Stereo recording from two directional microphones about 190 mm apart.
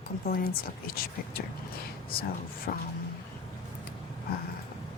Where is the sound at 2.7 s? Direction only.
50° left (ahead or behind).